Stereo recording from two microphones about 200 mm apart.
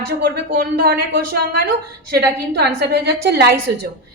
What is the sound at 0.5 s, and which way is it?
A woman's voice, 50° right (ahead or behind).